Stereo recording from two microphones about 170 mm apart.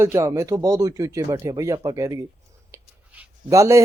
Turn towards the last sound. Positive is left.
turn(degrees=-20)  # may be behind; listen again after turning